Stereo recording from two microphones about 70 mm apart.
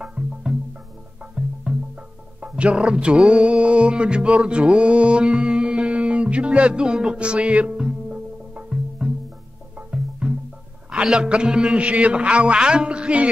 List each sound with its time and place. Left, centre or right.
0.0 s music: centre
10.9 s a man's voice: centre